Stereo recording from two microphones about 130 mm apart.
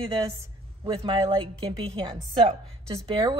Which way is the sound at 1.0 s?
40° right (ahead or behind).